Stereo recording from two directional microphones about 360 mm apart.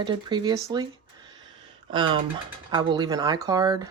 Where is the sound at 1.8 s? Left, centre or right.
Centre.